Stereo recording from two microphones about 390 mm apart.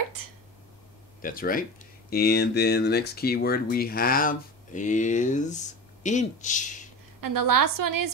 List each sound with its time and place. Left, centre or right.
0.2 s a sound: right
1.2 s speech: left
7.2 s a woman's voice: right